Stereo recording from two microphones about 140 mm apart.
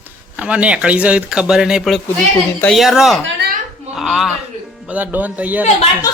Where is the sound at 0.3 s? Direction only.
10° right (ahead or behind).